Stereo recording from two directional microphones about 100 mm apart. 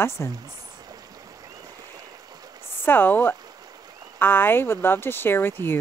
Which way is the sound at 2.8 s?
20° left (ahead or behind).